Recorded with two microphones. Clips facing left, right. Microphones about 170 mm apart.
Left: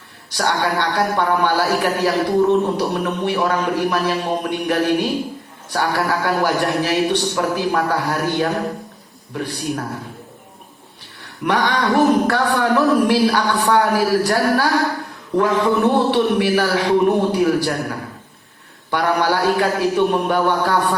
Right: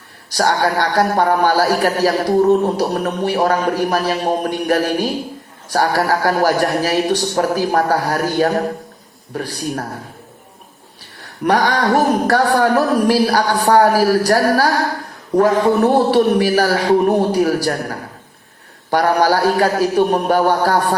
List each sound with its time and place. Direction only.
0.3 s a woman's voice: 40° right (ahead or behind)
11.4 s a woman's voice: 40° right (ahead or behind)